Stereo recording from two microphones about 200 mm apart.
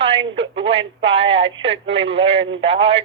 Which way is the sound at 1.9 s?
65° right (ahead or behind).